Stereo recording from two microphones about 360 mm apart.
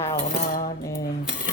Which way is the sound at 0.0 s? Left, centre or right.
Centre.